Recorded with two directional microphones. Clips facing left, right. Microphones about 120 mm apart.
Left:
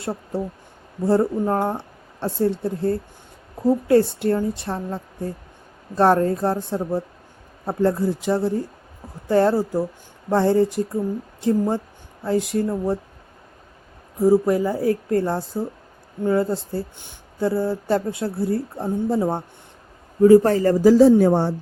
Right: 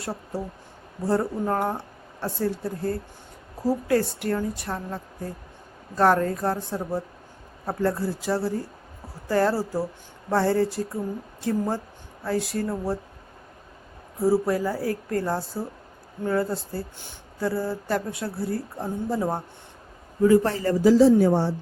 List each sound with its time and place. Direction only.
0.0 s speech: 25° left (ahead or behind)
12.2 s speech: 20° left (ahead or behind)
14.2 s speech: 15° left (ahead or behind)
20.2 s a man's voice: 35° left (ahead or behind); by 21.5 s 55° left (ahead or behind)